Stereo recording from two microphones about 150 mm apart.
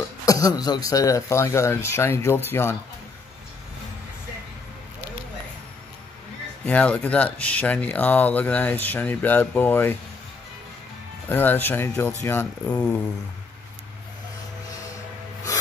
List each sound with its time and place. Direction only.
0.2 s speech: 25° left (ahead or behind)
6.6 s speech: 10° left (ahead or behind)
11.2 s speech: 15° left (ahead or behind)